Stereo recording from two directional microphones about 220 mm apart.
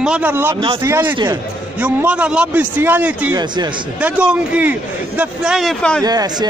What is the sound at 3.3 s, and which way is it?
Speech, 20° right (ahead or behind).